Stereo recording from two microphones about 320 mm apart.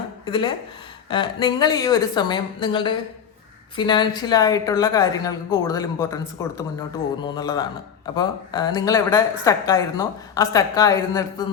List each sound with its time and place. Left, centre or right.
0.3 s a woman's voice: centre